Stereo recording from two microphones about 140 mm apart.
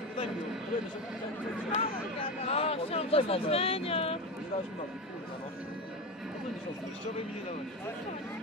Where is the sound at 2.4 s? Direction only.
45° left (ahead or behind).